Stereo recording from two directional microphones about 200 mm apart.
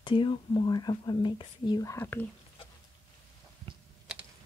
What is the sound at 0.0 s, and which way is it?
Speech, 25° left (ahead or behind).